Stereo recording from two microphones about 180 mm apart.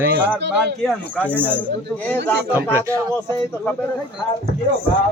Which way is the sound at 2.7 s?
15° right (ahead or behind).